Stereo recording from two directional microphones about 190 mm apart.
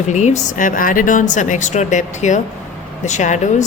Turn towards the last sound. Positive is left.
turn(degrees=40)  # may be behind; listen again after turning